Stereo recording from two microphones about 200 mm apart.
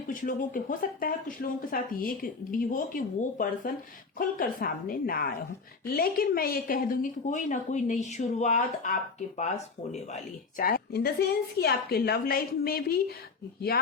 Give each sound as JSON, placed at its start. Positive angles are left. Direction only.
{"t": 0.1, "sound": "a woman's voice", "side_deg": 40}
{"t": 10.6, "sound": "speech", "side_deg": 45}